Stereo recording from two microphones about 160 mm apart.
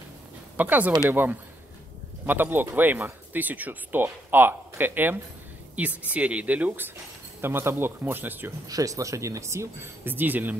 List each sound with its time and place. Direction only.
0.6 s speech: 10° right (ahead or behind)